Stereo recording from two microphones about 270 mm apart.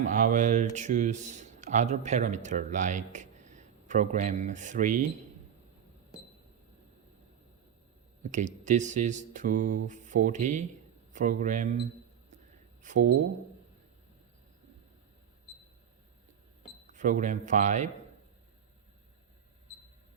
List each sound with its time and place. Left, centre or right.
0.0 s speech: right
8.2 s speech: right
12.8 s speech: right
16.9 s speech: right